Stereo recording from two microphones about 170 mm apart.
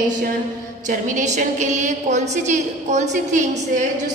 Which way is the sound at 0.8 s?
50° right (ahead or behind).